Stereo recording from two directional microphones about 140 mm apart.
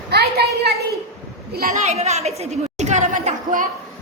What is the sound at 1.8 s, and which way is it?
Speech, 55° right (ahead or behind).